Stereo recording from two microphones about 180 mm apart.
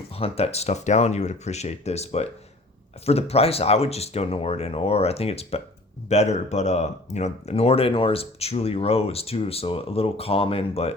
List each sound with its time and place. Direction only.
0.1 s speech: 35° left (ahead or behind)